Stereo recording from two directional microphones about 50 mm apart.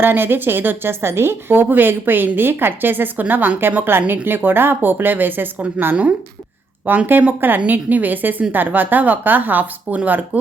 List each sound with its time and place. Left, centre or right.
0.0 s a woman's voice: right
6.8 s a woman's voice: right